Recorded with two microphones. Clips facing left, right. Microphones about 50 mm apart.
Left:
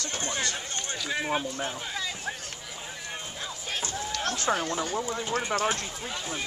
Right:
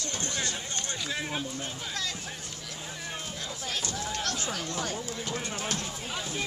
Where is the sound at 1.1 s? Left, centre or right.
Centre.